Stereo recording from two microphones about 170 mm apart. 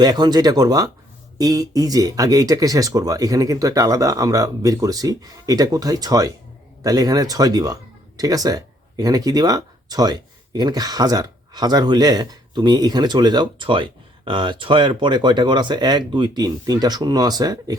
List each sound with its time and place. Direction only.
0.0 s speech: 25° right (ahead or behind)